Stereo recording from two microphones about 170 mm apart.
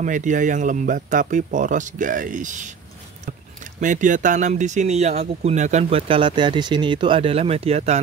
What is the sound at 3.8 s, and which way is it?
Speech, 50° right (ahead or behind).